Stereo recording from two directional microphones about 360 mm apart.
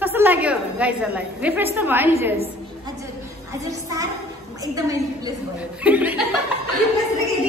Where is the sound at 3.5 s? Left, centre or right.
Centre.